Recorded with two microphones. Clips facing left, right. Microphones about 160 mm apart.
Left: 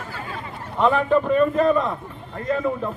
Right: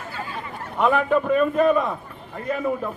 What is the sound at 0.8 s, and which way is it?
A man's voice, 5° right (ahead or behind).